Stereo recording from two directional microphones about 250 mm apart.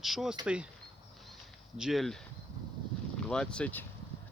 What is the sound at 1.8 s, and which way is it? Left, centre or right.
Speech, centre.